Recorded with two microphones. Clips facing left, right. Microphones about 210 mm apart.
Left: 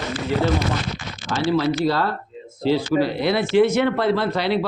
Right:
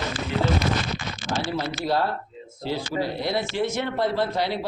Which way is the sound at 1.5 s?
80° left.